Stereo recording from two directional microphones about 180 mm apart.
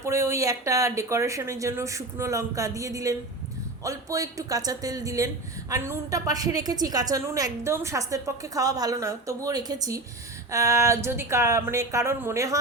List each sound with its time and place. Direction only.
0.0 s speech: 15° right (ahead or behind)